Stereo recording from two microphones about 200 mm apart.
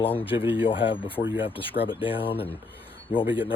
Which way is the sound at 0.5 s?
25° left (ahead or behind).